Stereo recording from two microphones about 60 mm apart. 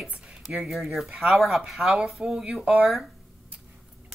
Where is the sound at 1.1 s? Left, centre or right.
Centre.